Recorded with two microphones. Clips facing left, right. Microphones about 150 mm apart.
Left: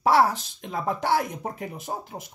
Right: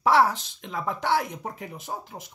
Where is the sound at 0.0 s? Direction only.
40° left (ahead or behind).